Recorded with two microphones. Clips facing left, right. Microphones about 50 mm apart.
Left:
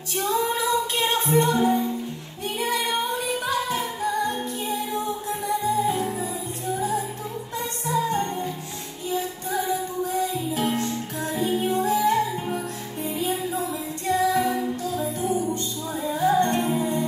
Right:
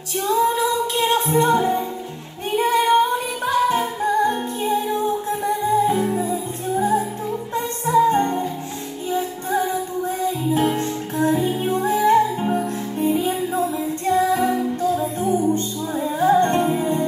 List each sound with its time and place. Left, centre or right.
0.6 s music: right